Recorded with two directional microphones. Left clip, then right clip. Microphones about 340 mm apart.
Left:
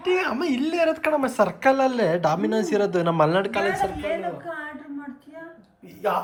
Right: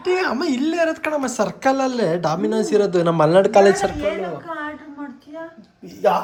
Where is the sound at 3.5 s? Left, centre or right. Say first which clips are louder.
Right 9 dB; centre.